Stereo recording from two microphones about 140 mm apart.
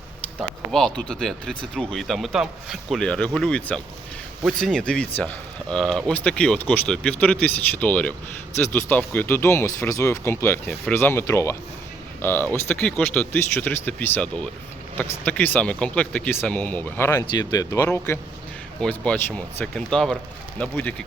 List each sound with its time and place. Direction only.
0.3 s speech: 5° left (ahead or behind)